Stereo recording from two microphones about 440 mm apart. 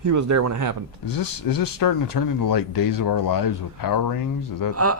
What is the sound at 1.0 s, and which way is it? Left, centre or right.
Speech, left.